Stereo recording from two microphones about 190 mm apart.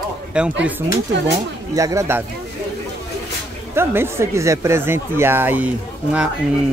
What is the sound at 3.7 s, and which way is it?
Speech, 10° right (ahead or behind).